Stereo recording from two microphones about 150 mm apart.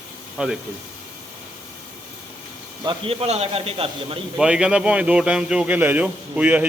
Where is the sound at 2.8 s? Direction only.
35° right (ahead or behind).